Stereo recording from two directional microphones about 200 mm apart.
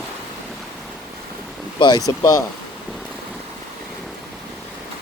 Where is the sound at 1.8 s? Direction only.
20° left (ahead or behind).